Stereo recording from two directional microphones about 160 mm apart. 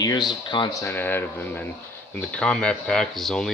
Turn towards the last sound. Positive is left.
turn(degrees=0)  # may be behind; listen again after turning